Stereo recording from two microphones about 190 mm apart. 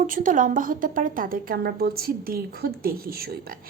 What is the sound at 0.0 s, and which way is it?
A woman's voice, 45° right (ahead or behind).